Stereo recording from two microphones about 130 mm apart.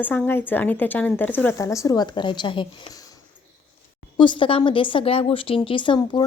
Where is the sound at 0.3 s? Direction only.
15° left (ahead or behind); by 3.0 s 35° left (ahead or behind).